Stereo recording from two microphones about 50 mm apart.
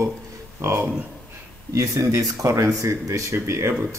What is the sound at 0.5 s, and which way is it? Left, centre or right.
Speech, right.